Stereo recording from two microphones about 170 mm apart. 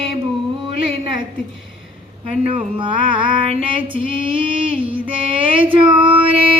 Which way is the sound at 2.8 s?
30° right (ahead or behind).